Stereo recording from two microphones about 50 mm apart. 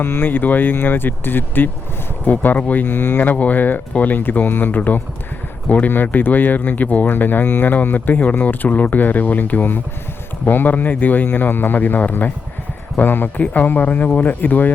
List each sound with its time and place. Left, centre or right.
0.0 s speech: left
2.8 s speech: left
3.3 s speech: left